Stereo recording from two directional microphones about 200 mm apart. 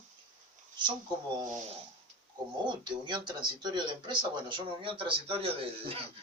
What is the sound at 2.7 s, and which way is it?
Speech, 20° right (ahead or behind).